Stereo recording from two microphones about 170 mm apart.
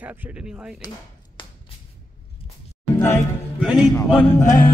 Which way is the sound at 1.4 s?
30° left (ahead or behind).